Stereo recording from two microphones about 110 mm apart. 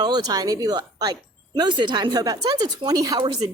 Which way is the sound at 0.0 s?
35° right (ahead or behind).